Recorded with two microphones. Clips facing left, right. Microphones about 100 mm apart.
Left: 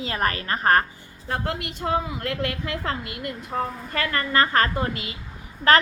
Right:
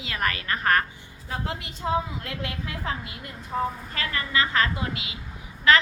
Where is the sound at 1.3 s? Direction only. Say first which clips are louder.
Left 5 dB; 60° left (ahead or behind).